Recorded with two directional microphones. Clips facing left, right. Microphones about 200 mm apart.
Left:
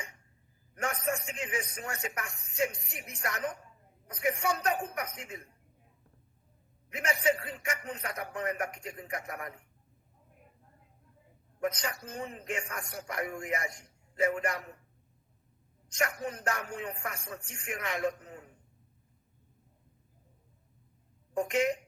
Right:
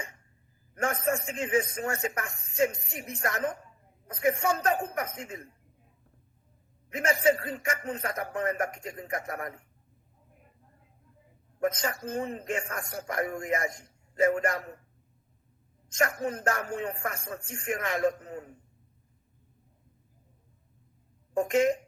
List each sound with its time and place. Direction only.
0.8 s a man's voice: 45° right (ahead or behind)
6.9 s a man's voice: 45° right (ahead or behind)
11.6 s a man's voice: 45° right (ahead or behind)
16.0 s a man's voice: 45° right (ahead or behind)
21.3 s a man's voice: 45° right (ahead or behind)